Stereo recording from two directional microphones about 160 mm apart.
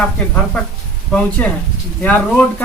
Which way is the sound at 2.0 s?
10° left (ahead or behind).